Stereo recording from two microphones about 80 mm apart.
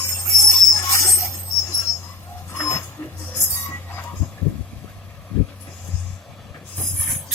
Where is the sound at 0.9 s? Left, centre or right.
Left.